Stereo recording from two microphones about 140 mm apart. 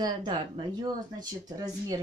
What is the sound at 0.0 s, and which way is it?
Speech, 35° right (ahead or behind).